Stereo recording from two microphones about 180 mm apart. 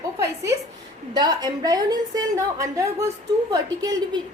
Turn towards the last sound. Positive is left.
turn(degrees=-20)  # may be behind; listen again after turning